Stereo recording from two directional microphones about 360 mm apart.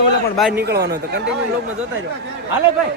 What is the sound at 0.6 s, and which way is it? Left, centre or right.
Speech, right.